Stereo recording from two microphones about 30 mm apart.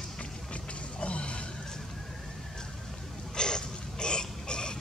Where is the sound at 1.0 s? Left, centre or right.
Left.